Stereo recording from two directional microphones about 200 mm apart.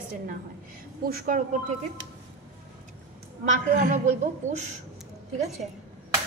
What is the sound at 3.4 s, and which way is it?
A woman's voice, 40° right (ahead or behind).